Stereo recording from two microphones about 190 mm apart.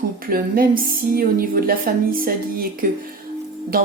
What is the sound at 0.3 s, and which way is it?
Speech, 50° right (ahead or behind).